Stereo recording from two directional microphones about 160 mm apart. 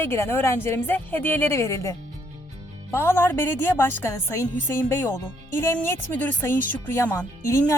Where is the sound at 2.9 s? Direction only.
15° left (ahead or behind).